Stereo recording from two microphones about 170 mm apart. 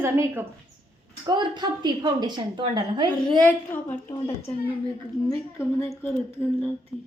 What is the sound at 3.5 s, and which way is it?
Speech, 10° left (ahead or behind).